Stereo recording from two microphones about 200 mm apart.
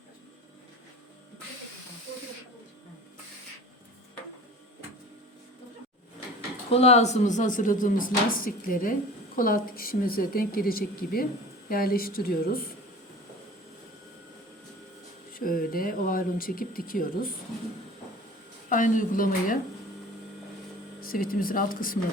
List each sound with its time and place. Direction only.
6.7 s speech: 30° left (ahead or behind); by 12.7 s 50° left (ahead or behind)
15.3 s speech: 45° left (ahead or behind)
18.7 s speech: 40° left (ahead or behind)
21.0 s speech: 45° left (ahead or behind)